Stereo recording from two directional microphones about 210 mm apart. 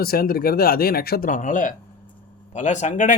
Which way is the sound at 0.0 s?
45° left (ahead or behind).